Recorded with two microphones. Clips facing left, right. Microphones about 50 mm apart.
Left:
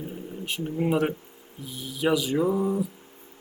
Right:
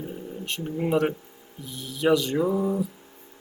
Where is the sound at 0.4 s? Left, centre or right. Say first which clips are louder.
Left 2 dB; centre.